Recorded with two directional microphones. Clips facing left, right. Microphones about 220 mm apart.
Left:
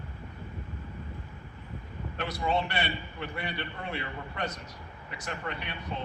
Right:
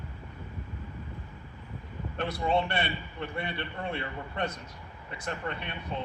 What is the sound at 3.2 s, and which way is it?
Speech, 30° right (ahead or behind).